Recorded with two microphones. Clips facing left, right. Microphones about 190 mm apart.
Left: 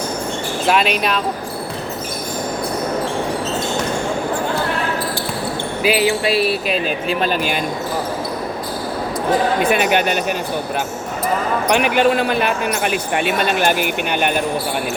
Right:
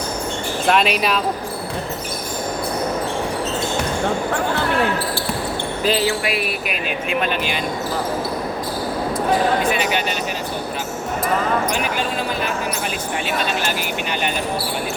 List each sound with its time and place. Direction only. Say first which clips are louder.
0.7 s speech: even; centre (ahead or behind)
5.8 s speech: left 3 dB; 15° left (ahead or behind)
6.2 s speech: left 6 dB; 30° left (ahead or behind)
9.7 s speech: left 5 dB; 55° left (ahead or behind)
11.7 s speech: left 8 dB; 65° left (ahead or behind)